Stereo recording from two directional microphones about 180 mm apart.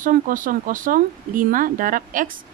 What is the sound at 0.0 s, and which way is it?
Speech, 50° right (ahead or behind).